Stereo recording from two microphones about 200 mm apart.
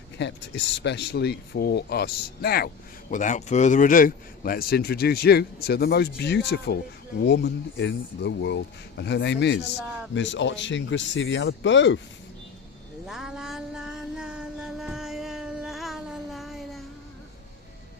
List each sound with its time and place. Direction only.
0.2 s speech: 60° left (ahead or behind)
3.1 s a man's voice: 40° left (ahead or behind); by 11.9 s 65° left (ahead or behind)
13.1 s music: 5° right (ahead or behind)